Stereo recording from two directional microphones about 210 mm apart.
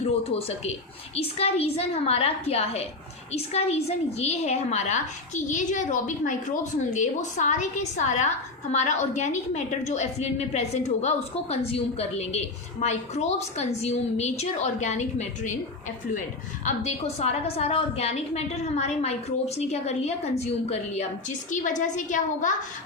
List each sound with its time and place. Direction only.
0.3 s a woman's voice: 30° left (ahead or behind)
16.6 s a woman's voice: 30° left (ahead or behind)